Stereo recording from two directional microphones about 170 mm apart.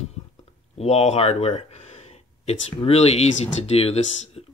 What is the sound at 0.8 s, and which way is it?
Speech, 40° left (ahead or behind).